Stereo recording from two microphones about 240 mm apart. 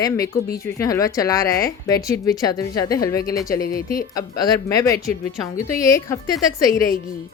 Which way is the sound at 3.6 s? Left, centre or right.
Left.